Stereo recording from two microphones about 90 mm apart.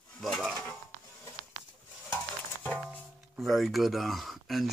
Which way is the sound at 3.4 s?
Centre (ahead or behind).